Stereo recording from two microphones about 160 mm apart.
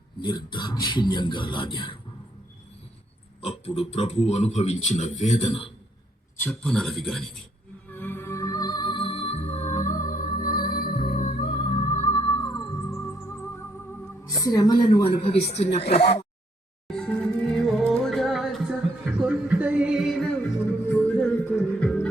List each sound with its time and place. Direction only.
0.2 s speech: 30° left (ahead or behind)
3.4 s speech: 35° left (ahead or behind)
6.4 s a man's voice: 5° left (ahead or behind)
7.9 s music: 10° left (ahead or behind); by 11.2 s 65° left (ahead or behind)
11.2 s music: 45° left (ahead or behind); by 12.7 s 30° left (ahead or behind)
14.3 s speech: 25° left (ahead or behind); by 16.2 s 40° left (ahead or behind)
16.9 s music: 5° left (ahead or behind)
19.2 s a sound: 10° right (ahead or behind)
20.9 s music: 5° left (ahead or behind)